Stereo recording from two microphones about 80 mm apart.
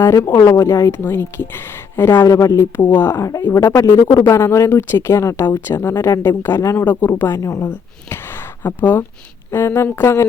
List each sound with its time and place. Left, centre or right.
0.0 s speech: left
2.2 s speech: left
2.9 s speech: left
3.8 s speech: left
6.8 s speech: left
7.1 s speech: left
7.7 s speech: left